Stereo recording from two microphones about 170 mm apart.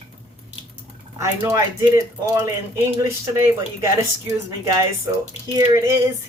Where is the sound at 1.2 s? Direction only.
15° right (ahead or behind).